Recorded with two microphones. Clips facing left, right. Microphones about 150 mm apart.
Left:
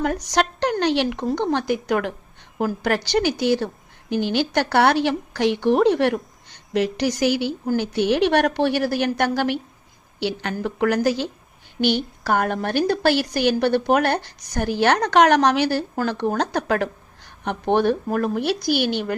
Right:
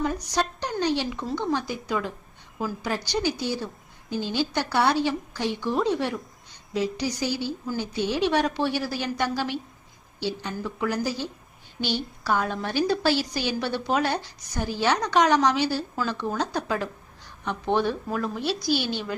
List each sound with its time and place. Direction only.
0.0 s a woman's voice: 85° left; by 9.6 s 65° left (ahead or behind)
10.2 s a woman's voice: 75° left (ahead or behind)
11.8 s a woman's voice: 60° left (ahead or behind)